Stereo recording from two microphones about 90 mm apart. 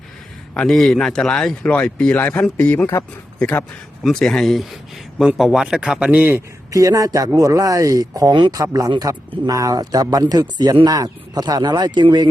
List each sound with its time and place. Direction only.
0.5 s speech: 5° left (ahead or behind)
4.0 s a man's voice: 5° left (ahead or behind)
6.1 s speech: 20° right (ahead or behind)
6.7 s speech: 40° right (ahead or behind)
8.3 s speech: 55° right (ahead or behind)
8.5 s speech: 40° right (ahead or behind); by 12.3 s 60° right (ahead or behind)